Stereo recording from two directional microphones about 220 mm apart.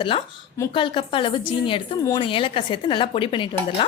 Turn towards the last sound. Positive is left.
turn(degrees=25)  # may be behind; listen again after turning